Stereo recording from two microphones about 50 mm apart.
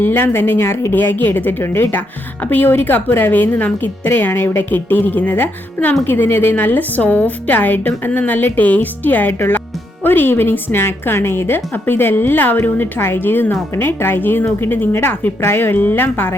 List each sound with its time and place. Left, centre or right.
0.0 s speech: left
0.7 s speech: left
0.9 s speech: left
15.4 s speech: left